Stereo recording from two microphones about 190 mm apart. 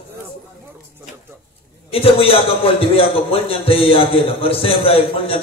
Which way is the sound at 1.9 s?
30° left (ahead or behind).